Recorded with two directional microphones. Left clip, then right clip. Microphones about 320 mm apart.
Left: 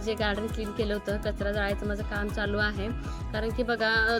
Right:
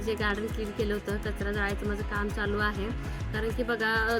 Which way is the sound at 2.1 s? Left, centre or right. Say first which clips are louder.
Left 1 dB; centre.